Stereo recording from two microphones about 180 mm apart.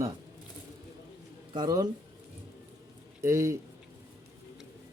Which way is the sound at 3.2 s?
15° right (ahead or behind).